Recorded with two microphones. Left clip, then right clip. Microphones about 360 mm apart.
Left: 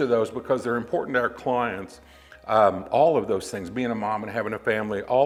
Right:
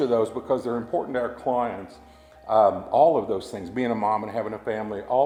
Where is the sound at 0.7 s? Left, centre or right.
Left.